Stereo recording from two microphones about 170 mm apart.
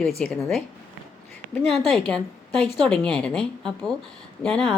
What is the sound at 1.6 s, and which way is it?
A woman's voice, centre (ahead or behind).